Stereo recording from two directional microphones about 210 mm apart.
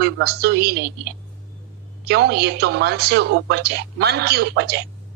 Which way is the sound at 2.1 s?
50° right (ahead or behind).